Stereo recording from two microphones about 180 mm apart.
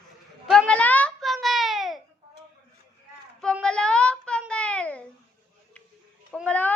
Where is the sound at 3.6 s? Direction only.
5° left (ahead or behind).